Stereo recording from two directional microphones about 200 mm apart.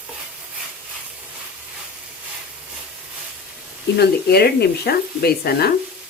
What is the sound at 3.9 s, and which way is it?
Speech, 50° left (ahead or behind).